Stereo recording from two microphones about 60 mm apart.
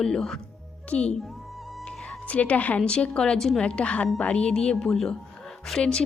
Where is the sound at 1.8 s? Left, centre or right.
Centre.